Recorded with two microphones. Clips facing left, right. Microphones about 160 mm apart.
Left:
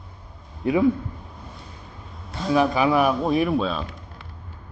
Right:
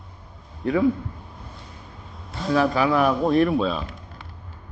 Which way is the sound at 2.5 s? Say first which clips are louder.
Left 1 dB; 15° left (ahead or behind).